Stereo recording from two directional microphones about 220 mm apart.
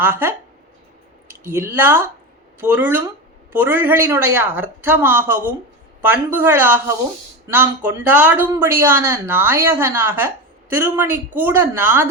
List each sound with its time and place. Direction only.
0.0 s speech: 10° right (ahead or behind)
1.5 s speech: 10° right (ahead or behind)